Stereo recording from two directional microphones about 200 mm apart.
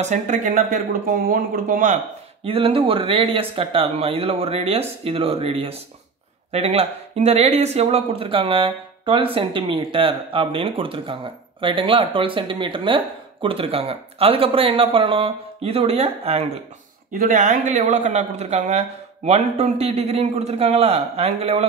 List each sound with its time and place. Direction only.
0.0 s speech: 35° right (ahead or behind)
2.4 s speech: 30° right (ahead or behind)
17.1 s speech: 40° right (ahead or behind)